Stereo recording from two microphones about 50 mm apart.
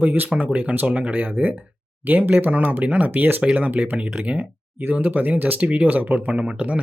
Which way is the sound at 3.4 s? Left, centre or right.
Right.